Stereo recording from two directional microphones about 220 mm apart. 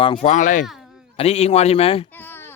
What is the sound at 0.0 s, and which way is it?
A man's voice, 25° left (ahead or behind).